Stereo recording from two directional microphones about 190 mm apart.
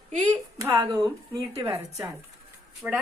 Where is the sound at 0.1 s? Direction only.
40° right (ahead or behind).